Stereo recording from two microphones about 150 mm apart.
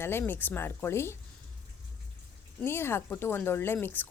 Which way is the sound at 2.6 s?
15° left (ahead or behind).